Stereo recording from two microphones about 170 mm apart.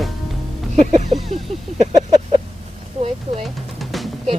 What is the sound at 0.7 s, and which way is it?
Speech, 40° right (ahead or behind).